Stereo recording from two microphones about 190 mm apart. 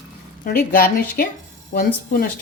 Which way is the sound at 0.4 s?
50° left (ahead or behind).